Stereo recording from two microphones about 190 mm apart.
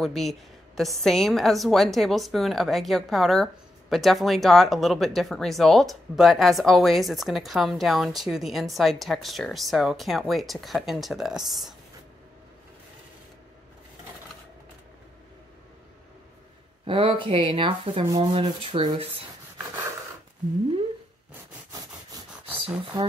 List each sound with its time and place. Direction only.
0.0 s speech: centre (ahead or behind)
16.8 s rub: 25° right (ahead or behind)